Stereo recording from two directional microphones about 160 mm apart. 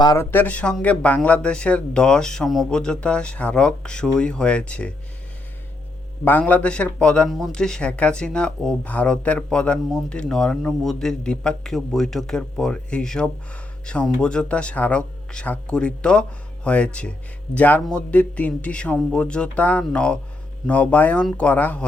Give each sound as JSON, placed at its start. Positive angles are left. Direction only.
{"t": 0.0, "sound": "speech", "side_deg": 25}
{"t": 0.3, "sound": "speech", "side_deg": 10}
{"t": 6.2, "sound": "speech", "side_deg": 10}